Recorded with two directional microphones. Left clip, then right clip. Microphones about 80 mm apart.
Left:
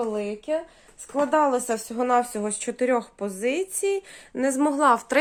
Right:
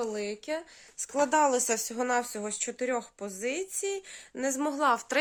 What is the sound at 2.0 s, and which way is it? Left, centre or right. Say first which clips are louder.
Speech: left 7 dB; right.